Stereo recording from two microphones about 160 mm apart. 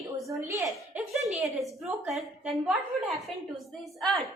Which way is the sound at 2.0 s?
Centre (ahead or behind).